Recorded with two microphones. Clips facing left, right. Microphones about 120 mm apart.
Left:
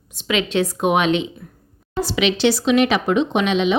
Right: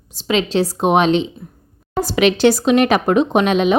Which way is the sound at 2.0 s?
45° right (ahead or behind).